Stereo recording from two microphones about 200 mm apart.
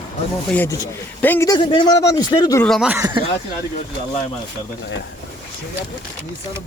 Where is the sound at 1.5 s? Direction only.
20° left (ahead or behind).